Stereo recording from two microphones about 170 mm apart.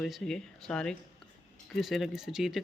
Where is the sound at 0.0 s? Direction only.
5° left (ahead or behind).